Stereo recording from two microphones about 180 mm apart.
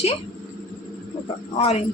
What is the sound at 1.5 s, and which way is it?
Speech, 35° left (ahead or behind).